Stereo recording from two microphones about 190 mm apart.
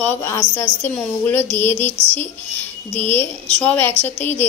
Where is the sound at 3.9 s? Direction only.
30° right (ahead or behind).